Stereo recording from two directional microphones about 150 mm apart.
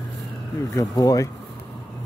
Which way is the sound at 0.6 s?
20° left (ahead or behind).